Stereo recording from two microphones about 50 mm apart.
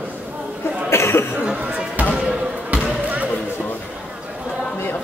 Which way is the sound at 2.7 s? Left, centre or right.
Right.